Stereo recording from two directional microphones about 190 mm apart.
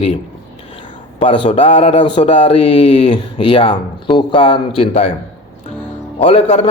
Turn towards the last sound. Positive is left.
turn(degrees=35)  # may be behind; listen again after turning